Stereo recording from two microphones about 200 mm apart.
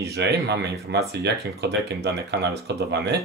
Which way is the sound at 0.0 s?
55° right (ahead or behind).